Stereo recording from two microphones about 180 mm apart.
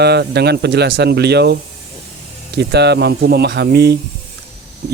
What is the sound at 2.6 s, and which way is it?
Speech, 70° right (ahead or behind).